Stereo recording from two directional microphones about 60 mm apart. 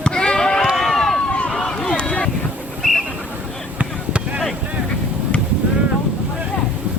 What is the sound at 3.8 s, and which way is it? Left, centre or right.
Basketball bounce, right.